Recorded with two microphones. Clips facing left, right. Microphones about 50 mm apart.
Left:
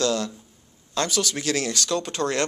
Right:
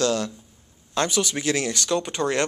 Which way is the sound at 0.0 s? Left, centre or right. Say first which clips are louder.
Right 1 dB; centre.